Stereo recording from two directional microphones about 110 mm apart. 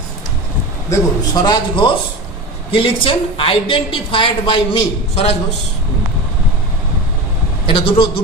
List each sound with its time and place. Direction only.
0.8 s a man's voice: 35° left (ahead or behind)
2.7 s a woman's voice: 55° left (ahead or behind)
7.6 s a woman's voice: 50° left (ahead or behind)